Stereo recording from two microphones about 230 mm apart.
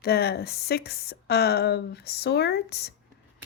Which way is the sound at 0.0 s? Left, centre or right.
Left.